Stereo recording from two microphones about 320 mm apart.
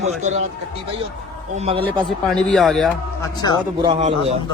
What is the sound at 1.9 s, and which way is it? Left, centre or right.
Speech, centre.